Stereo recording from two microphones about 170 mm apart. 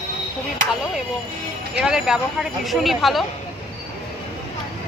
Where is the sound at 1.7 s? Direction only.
5° right (ahead or behind).